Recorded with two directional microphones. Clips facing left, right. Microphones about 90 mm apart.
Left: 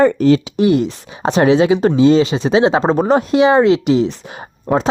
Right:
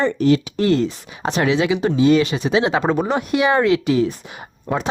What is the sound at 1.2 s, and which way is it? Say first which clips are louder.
Speech: left 6 dB; 35° left (ahead or behind).